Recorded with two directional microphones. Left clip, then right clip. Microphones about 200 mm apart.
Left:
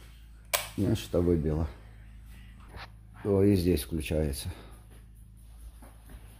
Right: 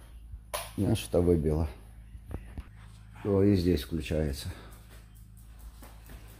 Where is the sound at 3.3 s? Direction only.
10° left (ahead or behind).